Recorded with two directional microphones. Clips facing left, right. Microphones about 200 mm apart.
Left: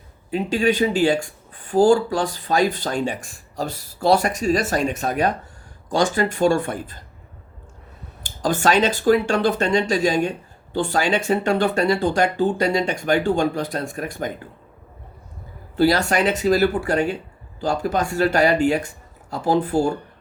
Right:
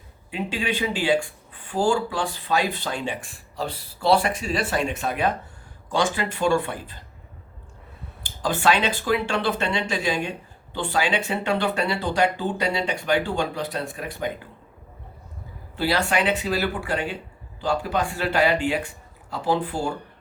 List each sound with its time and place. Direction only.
0.3 s speech: 40° left (ahead or behind)
8.2 s speech: 45° left (ahead or behind)
15.7 s speech: 40° left (ahead or behind)